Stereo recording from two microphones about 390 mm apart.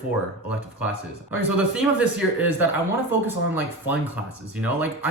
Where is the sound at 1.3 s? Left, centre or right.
Centre.